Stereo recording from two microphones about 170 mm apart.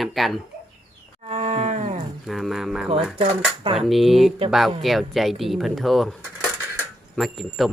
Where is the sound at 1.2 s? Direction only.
35° right (ahead or behind).